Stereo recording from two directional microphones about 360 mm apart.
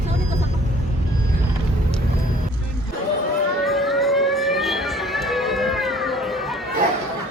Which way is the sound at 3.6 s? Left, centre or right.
Centre.